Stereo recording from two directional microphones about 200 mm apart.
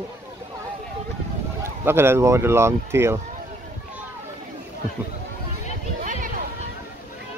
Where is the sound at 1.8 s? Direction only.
10° right (ahead or behind).